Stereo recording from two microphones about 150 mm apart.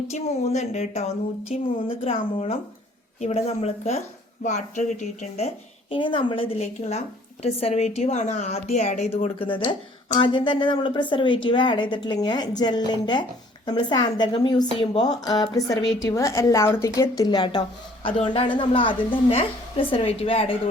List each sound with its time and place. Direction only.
0.1 s a woman's voice: 45° left (ahead or behind)
5.9 s a woman's voice: 35° left (ahead or behind)